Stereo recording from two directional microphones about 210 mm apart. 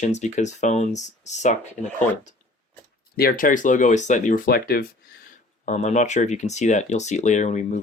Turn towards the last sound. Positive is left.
turn(degrees=35)  # may be behind; listen again after turning